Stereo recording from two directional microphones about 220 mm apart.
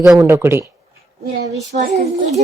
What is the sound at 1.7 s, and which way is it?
Speech, 35° right (ahead or behind).